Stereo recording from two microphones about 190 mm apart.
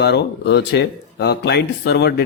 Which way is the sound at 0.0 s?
60° left (ahead or behind).